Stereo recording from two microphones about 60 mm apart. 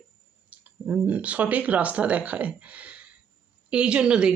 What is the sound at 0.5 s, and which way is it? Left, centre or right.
Speech, centre.